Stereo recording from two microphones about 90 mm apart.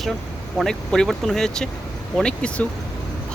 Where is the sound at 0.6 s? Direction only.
5° left (ahead or behind).